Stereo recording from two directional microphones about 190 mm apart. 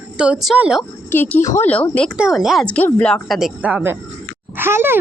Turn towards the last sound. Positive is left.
turn(degrees=-10)  # may be behind; listen again after turning